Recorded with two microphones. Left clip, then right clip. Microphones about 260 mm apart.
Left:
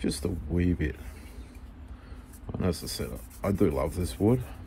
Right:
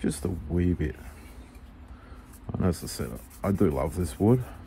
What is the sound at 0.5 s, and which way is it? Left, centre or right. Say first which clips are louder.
Speech: right 1 dB; centre.